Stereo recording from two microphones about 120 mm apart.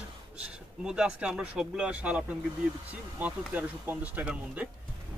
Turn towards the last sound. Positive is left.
turn(degrees=-10)  # may be behind; listen again after turning